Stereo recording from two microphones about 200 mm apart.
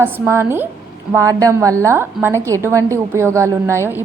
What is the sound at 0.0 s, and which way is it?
A woman's voice, 10° right (ahead or behind).